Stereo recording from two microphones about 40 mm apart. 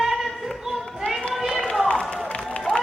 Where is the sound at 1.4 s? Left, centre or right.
Centre.